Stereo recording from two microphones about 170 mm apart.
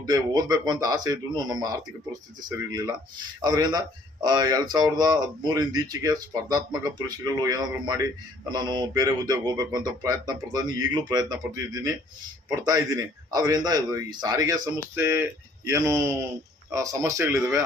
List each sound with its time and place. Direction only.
0.0 s speech: 20° right (ahead or behind)